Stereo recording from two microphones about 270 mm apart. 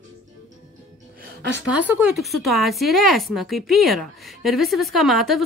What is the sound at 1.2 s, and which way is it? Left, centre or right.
Music, right.